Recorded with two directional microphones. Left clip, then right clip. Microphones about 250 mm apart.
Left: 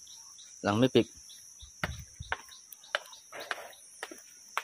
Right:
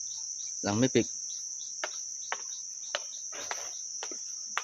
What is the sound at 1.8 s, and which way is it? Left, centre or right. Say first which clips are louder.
Cricket: left 1 dB; left.